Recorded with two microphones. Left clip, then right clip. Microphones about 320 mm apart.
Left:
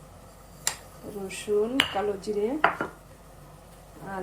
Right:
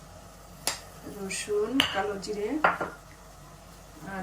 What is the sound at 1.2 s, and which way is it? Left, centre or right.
Speech, centre.